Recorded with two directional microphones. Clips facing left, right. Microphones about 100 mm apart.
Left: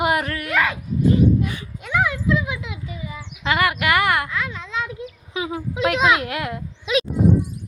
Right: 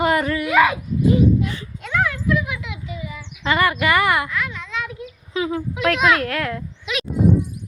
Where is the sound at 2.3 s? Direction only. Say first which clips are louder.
Even; 25° left (ahead or behind).